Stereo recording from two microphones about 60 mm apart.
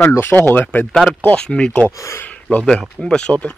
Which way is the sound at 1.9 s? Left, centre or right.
Left.